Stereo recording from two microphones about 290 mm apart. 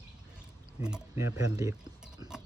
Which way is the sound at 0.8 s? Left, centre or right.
Centre.